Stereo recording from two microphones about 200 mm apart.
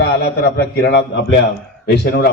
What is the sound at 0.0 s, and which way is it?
A man's voice, 55° left (ahead or behind).